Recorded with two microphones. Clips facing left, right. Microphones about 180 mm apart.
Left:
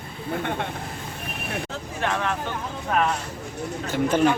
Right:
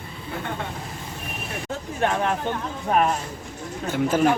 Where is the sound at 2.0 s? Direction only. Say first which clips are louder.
Right 3 dB; 35° right (ahead or behind).